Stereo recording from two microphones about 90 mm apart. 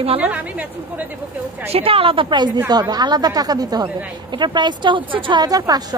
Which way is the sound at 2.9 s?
50° right (ahead or behind).